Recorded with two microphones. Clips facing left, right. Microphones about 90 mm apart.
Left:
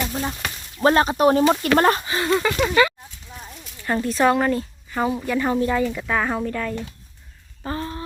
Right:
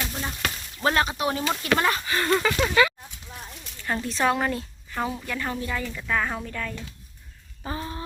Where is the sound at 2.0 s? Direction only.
20° left (ahead or behind).